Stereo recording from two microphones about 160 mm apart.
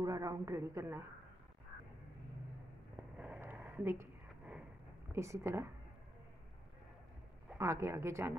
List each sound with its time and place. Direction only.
0.0 s a woman's voice: 20° right (ahead or behind)
3.2 s a sound: 10° right (ahead or behind)
5.1 s a woman's voice: 15° right (ahead or behind)
7.5 s a woman's voice: 15° right (ahead or behind)